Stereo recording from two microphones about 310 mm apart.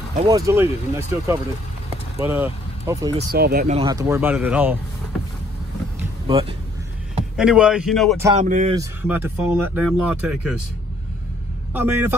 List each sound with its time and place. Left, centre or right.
0.1 s speech: centre
0.5 s speech: centre
3.2 s speech: right; by 4.7 s centre
5.9 s vehicle: centre
7.3 s speech: centre
8.4 s speech: right
8.7 s speech: centre
11.7 s speech: centre